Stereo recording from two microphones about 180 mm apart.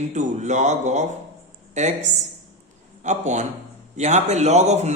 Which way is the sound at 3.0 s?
40° right (ahead or behind).